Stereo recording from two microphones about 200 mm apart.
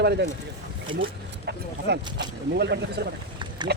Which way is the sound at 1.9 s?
60° right (ahead or behind).